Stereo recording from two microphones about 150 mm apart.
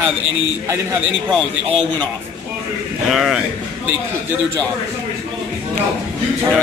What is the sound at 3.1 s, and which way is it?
Speech, centre (ahead or behind).